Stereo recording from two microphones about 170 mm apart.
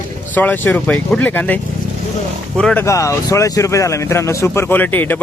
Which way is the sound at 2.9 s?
20° left (ahead or behind).